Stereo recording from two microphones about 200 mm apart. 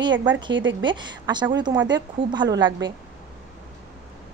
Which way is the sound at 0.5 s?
65° right (ahead or behind).